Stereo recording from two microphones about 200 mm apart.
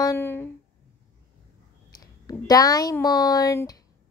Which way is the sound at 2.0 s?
20° left (ahead or behind).